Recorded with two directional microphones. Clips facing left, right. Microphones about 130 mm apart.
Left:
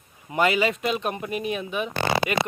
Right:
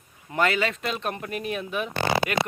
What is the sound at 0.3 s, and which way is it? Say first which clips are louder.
Speech: left 2 dB; 10° left (ahead or behind).